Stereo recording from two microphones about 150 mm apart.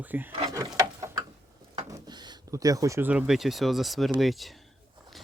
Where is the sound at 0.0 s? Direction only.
10° right (ahead or behind).